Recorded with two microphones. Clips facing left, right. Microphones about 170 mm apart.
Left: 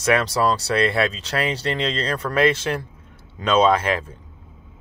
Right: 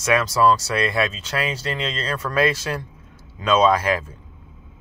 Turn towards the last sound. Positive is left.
turn(degrees=25)  # may be behind; listen again after turning